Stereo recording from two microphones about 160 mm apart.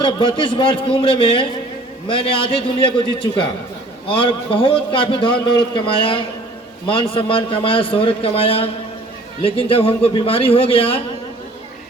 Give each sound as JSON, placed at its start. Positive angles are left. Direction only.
{"t": 0.0, "sound": "a man's voice", "side_deg": 30}
{"t": 4.1, "sound": "a man's voice", "side_deg": 30}